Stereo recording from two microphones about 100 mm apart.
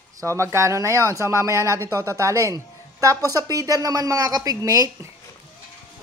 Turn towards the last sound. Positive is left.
turn(degrees=-35)  # may be behind; listen again after turning